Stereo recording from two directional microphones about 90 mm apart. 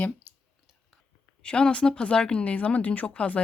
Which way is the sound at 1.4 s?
10° left (ahead or behind).